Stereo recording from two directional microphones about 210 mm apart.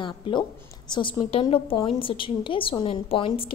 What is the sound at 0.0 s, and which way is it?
A woman's voice, 20° left (ahead or behind).